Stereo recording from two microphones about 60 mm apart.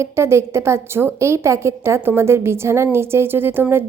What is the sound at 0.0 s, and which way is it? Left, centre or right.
A woman's voice, right.